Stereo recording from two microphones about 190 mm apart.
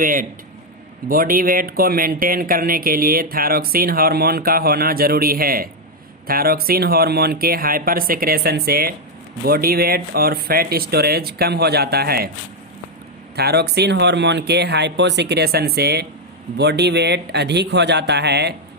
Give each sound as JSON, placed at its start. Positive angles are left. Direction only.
{"t": 0.0, "sound": "speech", "side_deg": -45}
{"t": 13.3, "sound": "speech", "side_deg": -55}